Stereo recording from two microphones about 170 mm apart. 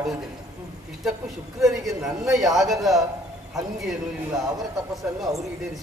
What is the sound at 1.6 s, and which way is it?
A woman's voice, centre (ahead or behind).